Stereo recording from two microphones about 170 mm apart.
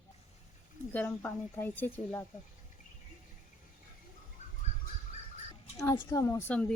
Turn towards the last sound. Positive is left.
turn(degrees=10)  # may be behind; listen again after turning